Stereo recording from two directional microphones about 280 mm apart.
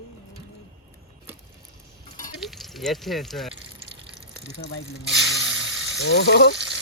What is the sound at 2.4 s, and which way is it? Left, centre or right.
Speech, centre.